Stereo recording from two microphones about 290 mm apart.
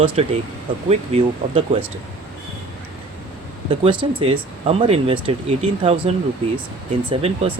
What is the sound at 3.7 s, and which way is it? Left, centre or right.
Speech, centre.